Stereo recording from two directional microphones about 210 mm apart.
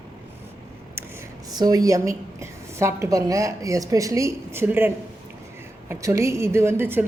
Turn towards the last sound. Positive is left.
turn(degrees=-10)  # may be behind; listen again after turning